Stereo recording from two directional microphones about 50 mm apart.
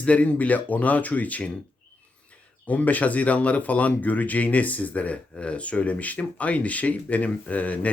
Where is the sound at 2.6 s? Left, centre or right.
Left.